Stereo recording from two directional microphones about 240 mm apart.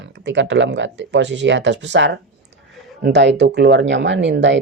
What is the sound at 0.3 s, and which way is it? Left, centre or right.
Speech, right.